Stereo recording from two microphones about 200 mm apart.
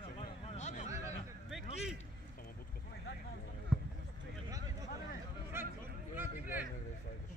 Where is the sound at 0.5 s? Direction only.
35° left (ahead or behind).